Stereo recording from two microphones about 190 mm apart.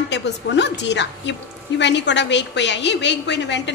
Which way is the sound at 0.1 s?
65° left (ahead or behind).